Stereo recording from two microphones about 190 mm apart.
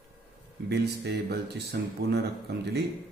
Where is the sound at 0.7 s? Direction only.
60° right (ahead or behind).